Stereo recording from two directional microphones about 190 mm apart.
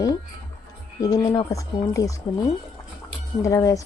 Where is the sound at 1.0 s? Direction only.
20° left (ahead or behind).